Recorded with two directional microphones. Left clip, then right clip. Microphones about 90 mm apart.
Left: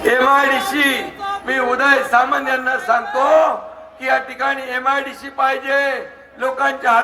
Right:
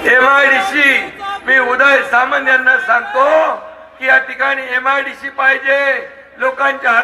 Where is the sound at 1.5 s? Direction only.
5° left (ahead or behind).